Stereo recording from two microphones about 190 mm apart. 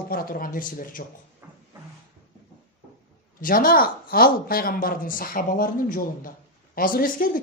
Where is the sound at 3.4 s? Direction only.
50° left (ahead or behind).